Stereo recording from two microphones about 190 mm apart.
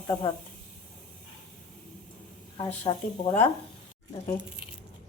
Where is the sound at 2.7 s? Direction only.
30° left (ahead or behind).